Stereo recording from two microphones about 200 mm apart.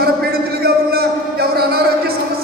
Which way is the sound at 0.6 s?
50° right (ahead or behind).